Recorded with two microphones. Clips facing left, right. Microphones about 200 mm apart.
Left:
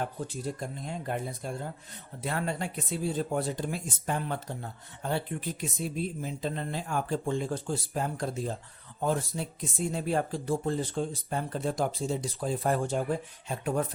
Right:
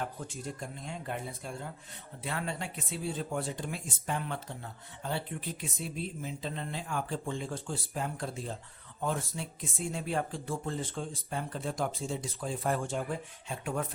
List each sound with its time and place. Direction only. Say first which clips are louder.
0.3 s speech: left 5 dB; 35° left (ahead or behind)